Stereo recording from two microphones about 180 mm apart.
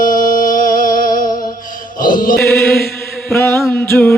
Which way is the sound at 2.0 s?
50° left (ahead or behind).